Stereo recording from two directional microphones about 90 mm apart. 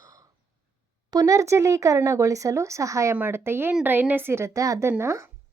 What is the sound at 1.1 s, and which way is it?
Speech, 40° right (ahead or behind).